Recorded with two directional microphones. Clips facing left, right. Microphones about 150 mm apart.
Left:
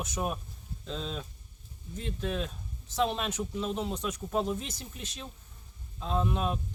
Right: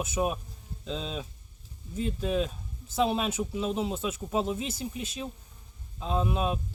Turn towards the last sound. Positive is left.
turn(degrees=-10)  # may be behind; listen again after turning